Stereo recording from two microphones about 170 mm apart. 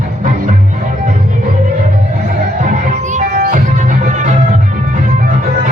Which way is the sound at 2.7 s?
50° right (ahead or behind).